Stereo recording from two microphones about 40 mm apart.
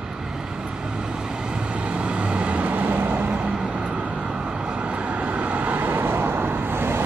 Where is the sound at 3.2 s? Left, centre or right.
Right.